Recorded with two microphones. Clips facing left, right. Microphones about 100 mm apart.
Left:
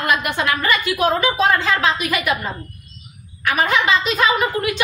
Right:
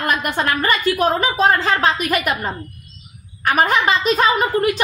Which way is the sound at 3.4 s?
45° right (ahead or behind).